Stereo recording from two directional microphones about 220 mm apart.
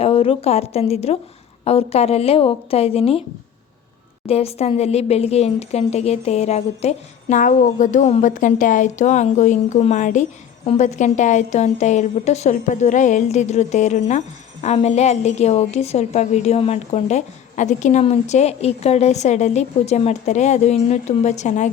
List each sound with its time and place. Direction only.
0.0 s a woman's voice: 25° left (ahead or behind)
4.3 s a woman's voice: 25° left (ahead or behind)